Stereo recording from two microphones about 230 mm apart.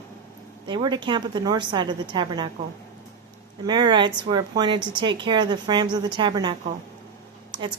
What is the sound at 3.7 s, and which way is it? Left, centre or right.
Speech, centre.